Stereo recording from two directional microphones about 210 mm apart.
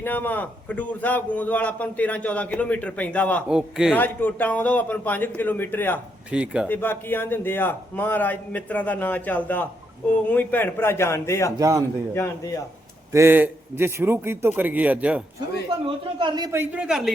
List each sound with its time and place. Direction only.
0.0 s a man's voice: 10° left (ahead or behind)
3.9 s a man's voice: 10° left (ahead or behind)
6.3 s a man's voice: 5° right (ahead or behind)
6.7 s a man's voice: 10° left (ahead or behind)
11.5 s a man's voice: 15° right (ahead or behind)
12.1 s a man's voice: 15° left (ahead or behind)
13.1 s a man's voice: 10° right (ahead or behind)
15.8 s a man's voice: 25° right (ahead or behind); by 17.0 s 5° right (ahead or behind)